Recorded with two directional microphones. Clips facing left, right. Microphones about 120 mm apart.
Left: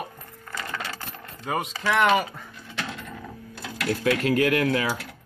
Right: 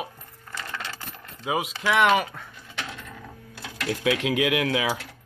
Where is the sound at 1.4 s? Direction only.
5° right (ahead or behind).